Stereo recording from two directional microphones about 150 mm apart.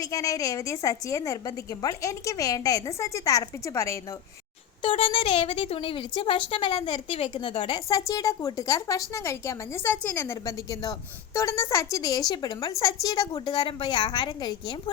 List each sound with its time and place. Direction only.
0.0 s a woman's voice: 25° left (ahead or behind)
4.8 s speech: 35° left (ahead or behind)
7.9 s a woman's voice: 20° left (ahead or behind)